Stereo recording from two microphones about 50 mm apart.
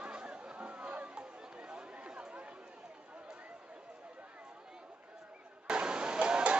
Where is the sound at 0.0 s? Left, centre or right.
Centre.